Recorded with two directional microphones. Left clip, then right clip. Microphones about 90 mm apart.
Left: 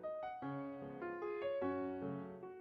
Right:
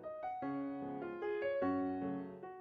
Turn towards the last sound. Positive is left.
turn(degrees=-25)  # may be behind; listen again after turning